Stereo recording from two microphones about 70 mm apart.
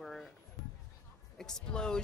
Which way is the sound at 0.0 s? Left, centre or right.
Centre.